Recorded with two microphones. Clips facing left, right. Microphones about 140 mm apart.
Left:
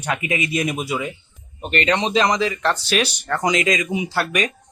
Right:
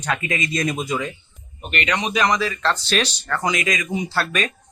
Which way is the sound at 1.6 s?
35° left (ahead or behind).